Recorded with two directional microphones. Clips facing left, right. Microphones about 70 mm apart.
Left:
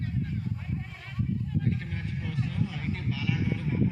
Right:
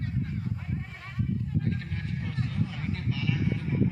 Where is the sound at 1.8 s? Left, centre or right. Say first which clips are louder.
Even; centre.